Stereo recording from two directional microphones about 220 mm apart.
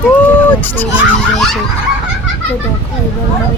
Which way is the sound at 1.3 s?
Centre (ahead or behind).